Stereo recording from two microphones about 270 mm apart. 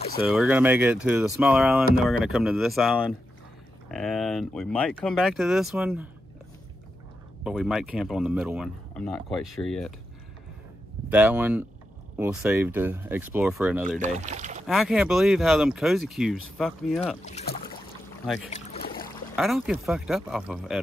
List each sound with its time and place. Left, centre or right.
0.2 s speech: centre
7.4 s speech: centre
11.1 s speech: centre
13.8 s speech: right
14.7 s speech: centre
17.2 s speech: left
18.2 s speech: centre
18.5 s boat: left
19.3 s speech: centre